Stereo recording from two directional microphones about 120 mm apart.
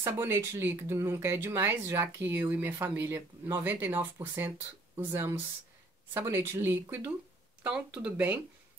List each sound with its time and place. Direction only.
0.0 s speech: 20° right (ahead or behind)